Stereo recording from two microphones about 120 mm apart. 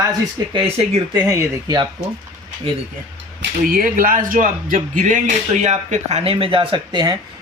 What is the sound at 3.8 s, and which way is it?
A man's voice, 90° right.